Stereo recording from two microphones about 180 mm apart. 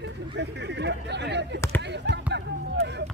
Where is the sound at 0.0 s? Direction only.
75° right (ahead or behind).